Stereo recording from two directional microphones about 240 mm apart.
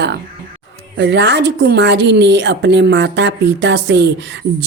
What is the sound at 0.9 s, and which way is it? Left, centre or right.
A woman's voice, right.